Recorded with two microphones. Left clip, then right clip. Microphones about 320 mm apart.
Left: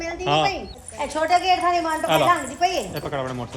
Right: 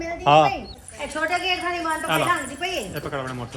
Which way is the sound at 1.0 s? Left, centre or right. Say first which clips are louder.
Left 4 dB; left.